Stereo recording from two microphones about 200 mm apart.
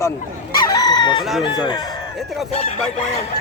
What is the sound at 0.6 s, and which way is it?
Speech, 20° left (ahead or behind).